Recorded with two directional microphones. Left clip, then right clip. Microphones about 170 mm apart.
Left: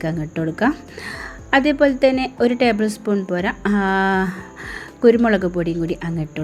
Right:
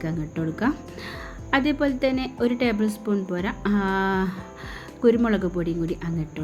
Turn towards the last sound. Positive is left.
turn(degrees=15)  # may be behind; listen again after turning